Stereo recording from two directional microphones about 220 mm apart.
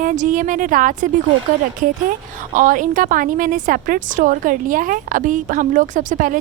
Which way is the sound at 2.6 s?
35° right (ahead or behind).